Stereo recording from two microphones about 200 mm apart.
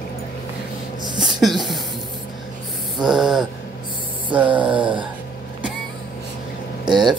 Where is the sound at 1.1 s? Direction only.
Centre (ahead or behind).